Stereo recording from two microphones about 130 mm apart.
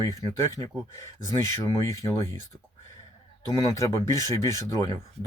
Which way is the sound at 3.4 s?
25° left (ahead or behind).